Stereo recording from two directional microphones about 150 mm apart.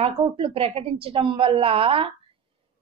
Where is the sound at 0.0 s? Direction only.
40° right (ahead or behind).